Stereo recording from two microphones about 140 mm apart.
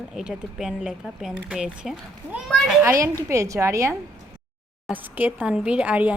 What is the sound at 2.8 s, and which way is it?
A woman's voice, 20° right (ahead or behind).